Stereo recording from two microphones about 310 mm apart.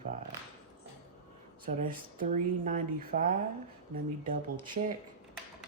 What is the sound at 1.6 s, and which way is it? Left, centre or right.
Speech, right.